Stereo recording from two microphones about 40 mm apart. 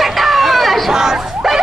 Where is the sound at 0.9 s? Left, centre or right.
Centre.